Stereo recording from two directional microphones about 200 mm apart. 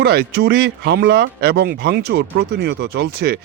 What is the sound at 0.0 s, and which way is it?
Speech, 55° right (ahead or behind).